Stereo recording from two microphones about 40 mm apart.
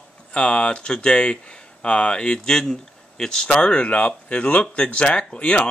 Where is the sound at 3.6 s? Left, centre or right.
Left.